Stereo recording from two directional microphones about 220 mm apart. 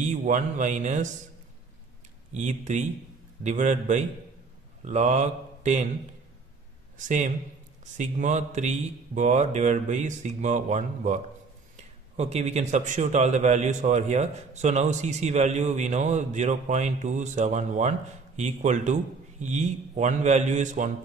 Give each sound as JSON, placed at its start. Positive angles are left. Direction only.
{"t": 0.0, "sound": "a man's voice", "side_deg": -35}
{"t": 2.3, "sound": "a man's voice", "side_deg": -35}
{"t": 7.0, "sound": "a man's voice", "side_deg": -35}
{"t": 12.2, "sound": "a man's voice", "side_deg": -30}